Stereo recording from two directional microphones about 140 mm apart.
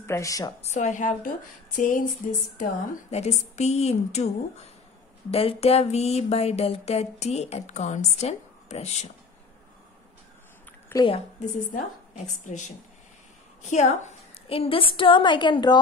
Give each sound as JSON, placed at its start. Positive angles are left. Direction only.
{"t": 0.0, "sound": "a woman's voice", "side_deg": 20}
{"t": 0.6, "sound": "a woman's voice", "side_deg": 55}
{"t": 3.1, "sound": "a sound", "side_deg": 50}
{"t": 5.3, "sound": "a sound", "side_deg": 45}
{"t": 10.9, "sound": "a woman's voice", "side_deg": 15}
{"t": 12.4, "sound": "a woman's voice", "side_deg": 60}